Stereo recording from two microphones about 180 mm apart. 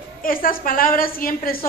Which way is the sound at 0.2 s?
50° left (ahead or behind).